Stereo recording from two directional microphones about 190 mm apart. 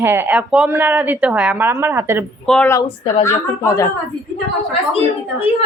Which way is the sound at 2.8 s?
30° left (ahead or behind).